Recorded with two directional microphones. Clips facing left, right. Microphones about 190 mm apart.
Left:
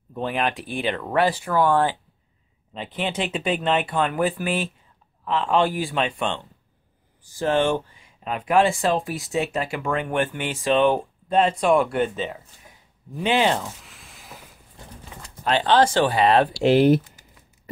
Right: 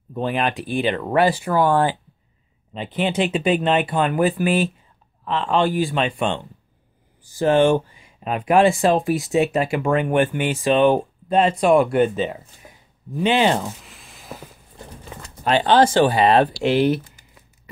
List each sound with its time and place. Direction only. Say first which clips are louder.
0.1 s speech: right 3 dB; centre (ahead or behind)
13.1 s speech: right 3 dB; centre (ahead or behind)
15.4 s speech: right 3 dB; 10° right (ahead or behind)
16.6 s speech: left 2 dB; 45° left (ahead or behind)